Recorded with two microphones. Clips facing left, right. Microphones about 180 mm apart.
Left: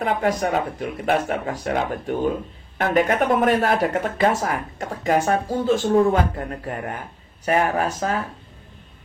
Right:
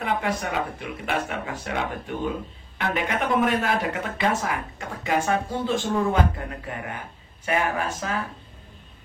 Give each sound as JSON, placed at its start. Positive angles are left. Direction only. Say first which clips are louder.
{"t": 0.0, "sound": "speech", "louder": "left 5 dB", "side_deg": 45}